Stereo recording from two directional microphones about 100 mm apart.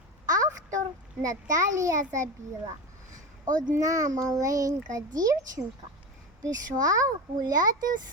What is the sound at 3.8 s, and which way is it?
A child's voice, 35° right (ahead or behind).